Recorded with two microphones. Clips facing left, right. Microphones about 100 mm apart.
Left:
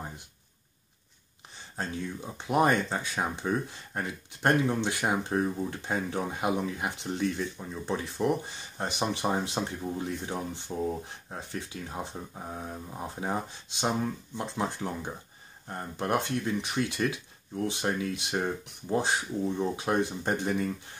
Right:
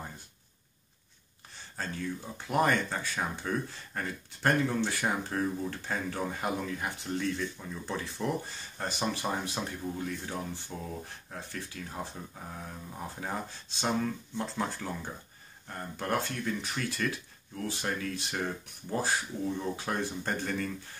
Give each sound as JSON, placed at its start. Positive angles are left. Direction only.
{"t": 1.8, "sound": "speech", "side_deg": 20}